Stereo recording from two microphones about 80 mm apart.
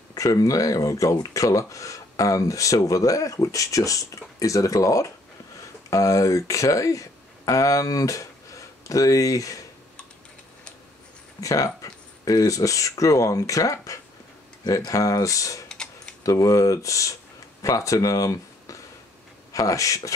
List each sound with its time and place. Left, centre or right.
0.1 s speech: left
11.4 s speech: left
15.7 s tick-tock: centre
16.3 s speech: left